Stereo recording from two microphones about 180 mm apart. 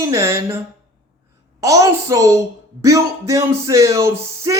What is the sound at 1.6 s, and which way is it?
Speech, 20° right (ahead or behind).